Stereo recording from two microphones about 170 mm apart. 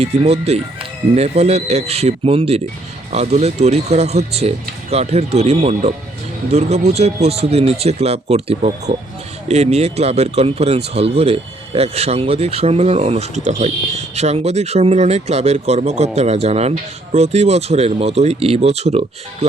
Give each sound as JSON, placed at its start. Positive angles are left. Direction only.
{"t": 0.0, "sound": "speech", "side_deg": -40}